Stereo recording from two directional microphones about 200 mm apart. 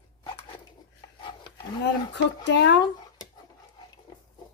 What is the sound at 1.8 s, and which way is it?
Speech, 60° left (ahead or behind).